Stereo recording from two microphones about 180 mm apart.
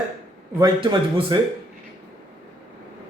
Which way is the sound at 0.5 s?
25° right (ahead or behind).